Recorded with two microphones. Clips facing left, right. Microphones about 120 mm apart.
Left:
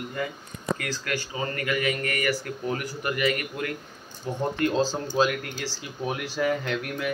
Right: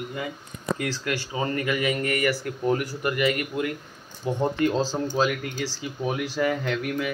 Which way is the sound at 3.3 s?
20° right (ahead or behind).